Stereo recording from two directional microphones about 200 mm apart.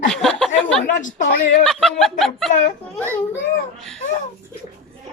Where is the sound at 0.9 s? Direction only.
40° left (ahead or behind).